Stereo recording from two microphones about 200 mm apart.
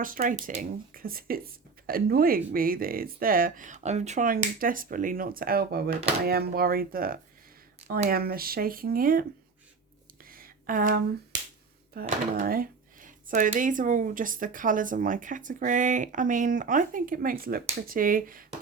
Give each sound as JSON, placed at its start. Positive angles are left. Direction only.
{"t": 0.0, "sound": "speech", "side_deg": -45}
{"t": 10.2, "sound": "a sound", "side_deg": -45}
{"t": 11.9, "sound": "speech", "side_deg": -45}